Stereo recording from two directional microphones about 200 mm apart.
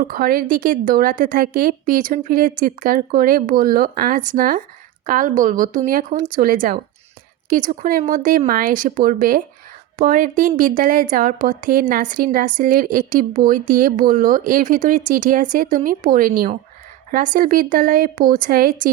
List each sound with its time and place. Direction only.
0.0 s a woman's voice: 45° right (ahead or behind)